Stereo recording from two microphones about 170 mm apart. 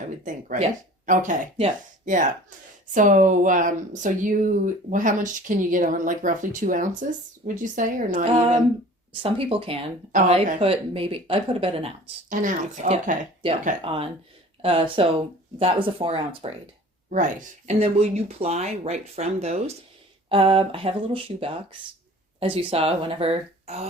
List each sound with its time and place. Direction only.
0.3 s speech: 50° right (ahead or behind)
9.2 s speech: 35° right (ahead or behind)
12.3 s speech: 50° right (ahead or behind)
13.8 s speech: 35° right (ahead or behind)
17.1 s speech: 50° right (ahead or behind)